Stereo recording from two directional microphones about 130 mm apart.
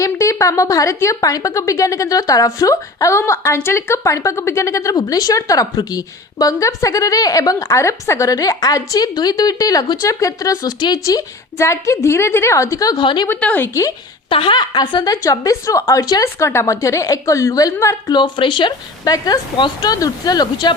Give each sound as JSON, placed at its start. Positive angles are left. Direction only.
{"t": 0.0, "sound": "a woman's voice", "side_deg": 25}
{"t": 13.2, "sound": "a woman's voice", "side_deg": 15}
{"t": 14.3, "sound": "a woman's voice", "side_deg": 40}
{"t": 18.2, "sound": "speech", "side_deg": 40}